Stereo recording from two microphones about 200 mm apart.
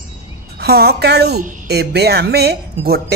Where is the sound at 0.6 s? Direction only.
50° right (ahead or behind).